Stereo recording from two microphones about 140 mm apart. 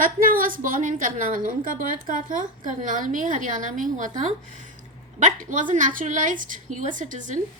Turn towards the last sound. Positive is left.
turn(degrees=-65)  # may be behind; listen again after turning